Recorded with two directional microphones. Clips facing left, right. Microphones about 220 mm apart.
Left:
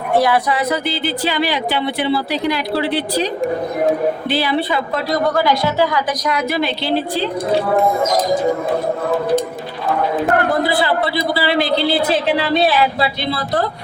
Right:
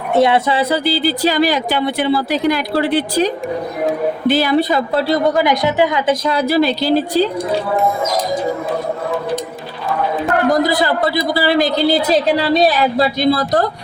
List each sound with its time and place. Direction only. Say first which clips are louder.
0.1 s a woman's voice: right 2 dB; 25° right (ahead or behind); by 5.0 s 40° right (ahead or behind)
5.1 s a man's voice: even; 20° right (ahead or behind); by 7.3 s 40° right (ahead or behind)
10.5 s a man's voice: right 2 dB; 40° right (ahead or behind)